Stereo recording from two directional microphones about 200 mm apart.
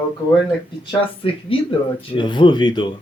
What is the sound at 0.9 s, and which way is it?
Speech, 25° left (ahead or behind).